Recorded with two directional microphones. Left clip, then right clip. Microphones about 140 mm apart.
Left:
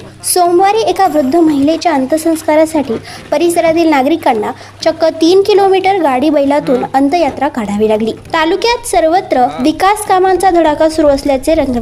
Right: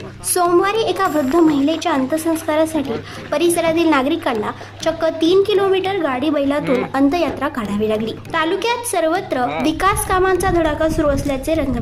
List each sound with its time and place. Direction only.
0.6 s a woman's voice: 25° left (ahead or behind)